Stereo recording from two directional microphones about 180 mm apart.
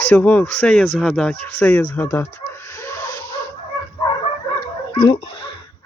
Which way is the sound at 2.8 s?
15° left (ahead or behind).